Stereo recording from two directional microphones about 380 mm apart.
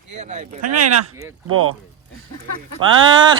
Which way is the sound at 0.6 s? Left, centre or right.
Right.